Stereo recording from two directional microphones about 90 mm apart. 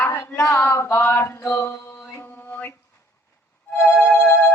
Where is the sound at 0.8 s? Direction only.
25° left (ahead or behind).